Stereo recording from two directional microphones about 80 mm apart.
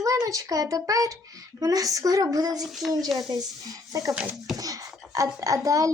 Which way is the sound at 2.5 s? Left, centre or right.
Centre.